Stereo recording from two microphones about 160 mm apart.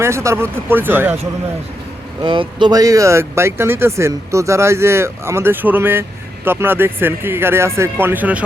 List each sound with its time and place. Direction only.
0.0 s speech: 15° right (ahead or behind)
2.2 s speech: 30° right (ahead or behind); by 8.4 s 10° right (ahead or behind)